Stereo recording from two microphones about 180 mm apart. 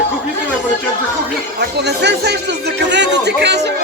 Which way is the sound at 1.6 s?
65° right (ahead or behind).